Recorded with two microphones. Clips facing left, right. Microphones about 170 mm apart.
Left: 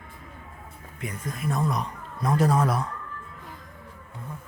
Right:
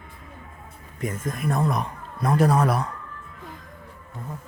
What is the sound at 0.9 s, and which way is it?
Speech, 45° right (ahead or behind).